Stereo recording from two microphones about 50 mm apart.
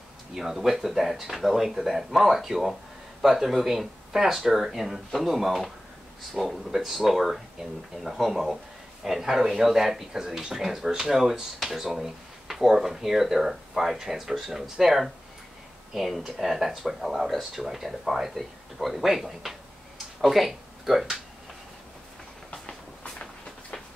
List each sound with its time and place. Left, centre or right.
0.3 s speech: centre
22.5 s train: centre